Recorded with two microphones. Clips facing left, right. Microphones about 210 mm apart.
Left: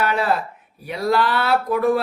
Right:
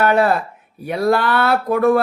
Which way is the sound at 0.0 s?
50° right (ahead or behind).